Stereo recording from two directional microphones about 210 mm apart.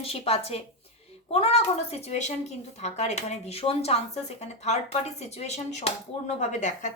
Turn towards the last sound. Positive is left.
turn(degrees=35)  # may be behind; listen again after turning